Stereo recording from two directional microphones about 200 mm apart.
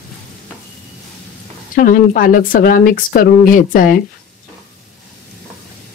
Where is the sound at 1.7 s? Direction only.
45° left (ahead or behind).